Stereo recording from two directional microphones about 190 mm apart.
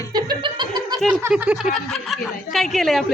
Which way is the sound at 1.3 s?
5° right (ahead or behind).